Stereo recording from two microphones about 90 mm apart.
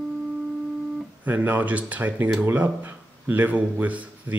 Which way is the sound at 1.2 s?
20° right (ahead or behind).